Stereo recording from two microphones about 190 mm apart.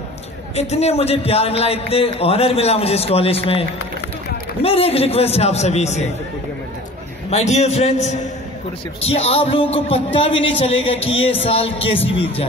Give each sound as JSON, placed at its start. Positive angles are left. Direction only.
{"t": 0.6, "sound": "a man's voice", "side_deg": 35}
{"t": 4.6, "sound": "a man's voice", "side_deg": 30}
{"t": 7.2, "sound": "a man's voice", "side_deg": 35}